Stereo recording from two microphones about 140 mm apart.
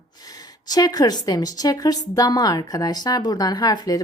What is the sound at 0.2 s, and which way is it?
A woman's voice, 30° left (ahead or behind).